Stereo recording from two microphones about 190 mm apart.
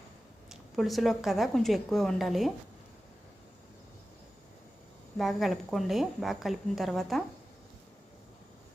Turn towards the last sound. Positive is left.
turn(degrees=0)  # may be behind; listen again after turning